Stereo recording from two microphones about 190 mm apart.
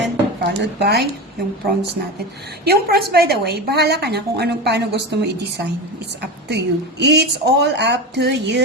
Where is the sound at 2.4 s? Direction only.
55° right (ahead or behind).